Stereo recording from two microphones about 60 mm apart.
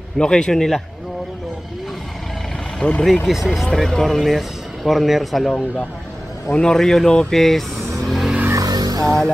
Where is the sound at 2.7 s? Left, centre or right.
Centre.